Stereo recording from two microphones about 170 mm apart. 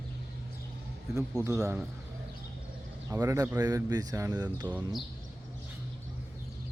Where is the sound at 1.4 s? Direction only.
15° right (ahead or behind).